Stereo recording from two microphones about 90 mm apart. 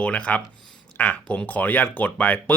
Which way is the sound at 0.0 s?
15° left (ahead or behind).